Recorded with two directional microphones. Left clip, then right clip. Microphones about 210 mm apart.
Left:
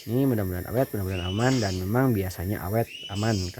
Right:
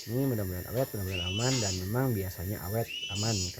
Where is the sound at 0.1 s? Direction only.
40° left (ahead or behind).